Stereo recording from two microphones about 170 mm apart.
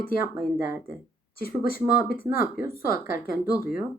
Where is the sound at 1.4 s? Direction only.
60° left (ahead or behind).